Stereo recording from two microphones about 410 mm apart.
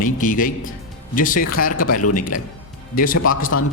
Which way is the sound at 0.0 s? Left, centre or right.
Centre.